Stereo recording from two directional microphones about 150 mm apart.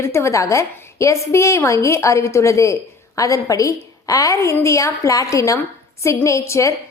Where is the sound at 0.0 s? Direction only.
20° left (ahead or behind).